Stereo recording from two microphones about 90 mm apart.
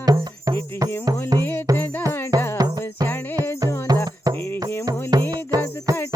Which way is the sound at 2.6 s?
45° right (ahead or behind).